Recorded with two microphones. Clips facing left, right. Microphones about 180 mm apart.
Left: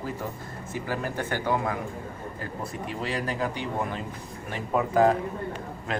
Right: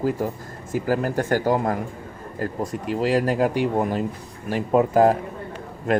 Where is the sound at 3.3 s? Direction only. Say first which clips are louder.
Right 9 dB; 55° right (ahead or behind).